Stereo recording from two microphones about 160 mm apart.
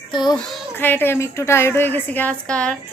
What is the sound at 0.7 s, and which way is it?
Speech, 10° left (ahead or behind).